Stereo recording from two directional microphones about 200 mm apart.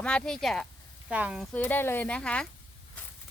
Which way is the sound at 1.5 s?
10° left (ahead or behind).